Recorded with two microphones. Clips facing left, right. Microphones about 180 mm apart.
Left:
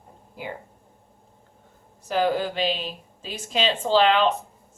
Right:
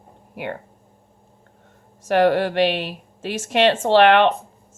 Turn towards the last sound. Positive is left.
turn(degrees=-70)  # may be behind; listen again after turning